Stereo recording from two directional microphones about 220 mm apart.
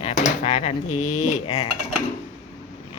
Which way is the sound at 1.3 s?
30° left (ahead or behind).